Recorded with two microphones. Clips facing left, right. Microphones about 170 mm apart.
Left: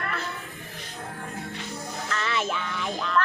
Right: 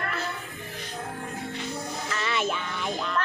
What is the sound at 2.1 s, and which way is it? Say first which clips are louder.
Music: even; 5° right (ahead or behind).